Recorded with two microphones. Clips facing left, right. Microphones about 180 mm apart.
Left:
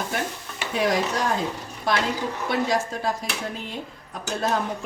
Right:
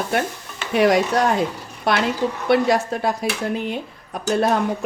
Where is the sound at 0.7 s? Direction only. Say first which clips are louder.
Right 7 dB; 65° right (ahead or behind).